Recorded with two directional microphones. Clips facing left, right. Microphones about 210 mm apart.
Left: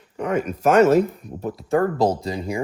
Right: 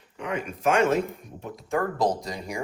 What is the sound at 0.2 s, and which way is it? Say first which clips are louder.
Speech: left 7 dB; 45° left (ahead or behind).